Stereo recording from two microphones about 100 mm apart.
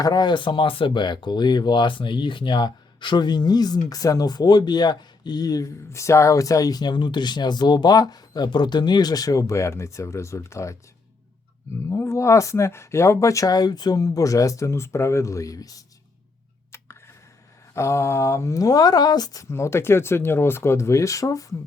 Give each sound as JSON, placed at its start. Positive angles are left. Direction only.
{"t": 0.0, "sound": "speech", "side_deg": 45}
{"t": 11.9, "sound": "speech", "side_deg": 30}
{"t": 17.7, "sound": "speech", "side_deg": 30}